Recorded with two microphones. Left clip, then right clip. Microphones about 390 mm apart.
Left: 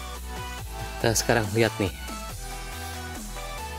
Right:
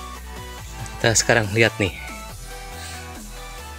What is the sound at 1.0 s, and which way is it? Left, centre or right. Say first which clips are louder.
Speech: right 6 dB; left.